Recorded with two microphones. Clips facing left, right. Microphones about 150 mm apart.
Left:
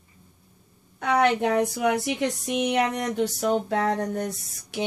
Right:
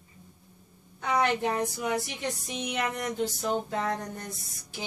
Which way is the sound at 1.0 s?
70° left (ahead or behind).